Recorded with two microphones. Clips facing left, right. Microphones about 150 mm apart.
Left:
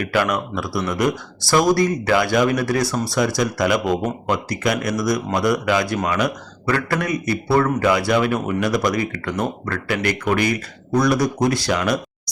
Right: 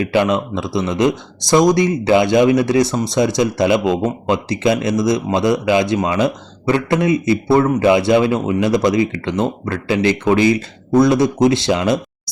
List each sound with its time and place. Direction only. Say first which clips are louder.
0.0 s speech: right 5 dB; 25° right (ahead or behind)